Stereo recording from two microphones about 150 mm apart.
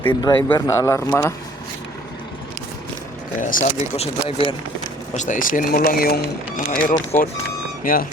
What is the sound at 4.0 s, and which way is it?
Speech, 40° left (ahead or behind).